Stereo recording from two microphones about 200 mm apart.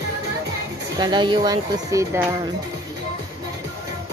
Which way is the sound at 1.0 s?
20° right (ahead or behind).